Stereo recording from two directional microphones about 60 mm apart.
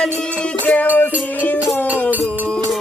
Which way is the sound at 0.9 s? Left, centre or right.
Left.